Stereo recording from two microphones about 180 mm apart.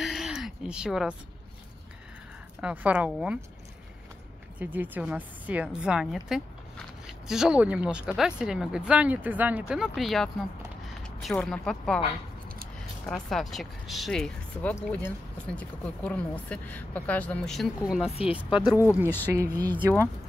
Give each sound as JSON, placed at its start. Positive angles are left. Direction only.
{"t": 0.0, "sound": "a sound", "side_deg": 0}
{"t": 2.6, "sound": "a woman's voice", "side_deg": -10}
{"t": 4.6, "sound": "a woman's voice", "side_deg": -10}
{"t": 13.0, "sound": "a woman's voice", "side_deg": 5}